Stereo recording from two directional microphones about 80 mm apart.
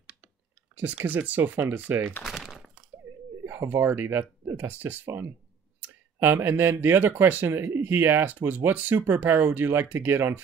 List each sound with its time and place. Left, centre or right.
1.0 s speech: centre
2.2 s crumpling: centre
3.1 s a sound: right
3.4 s speech: right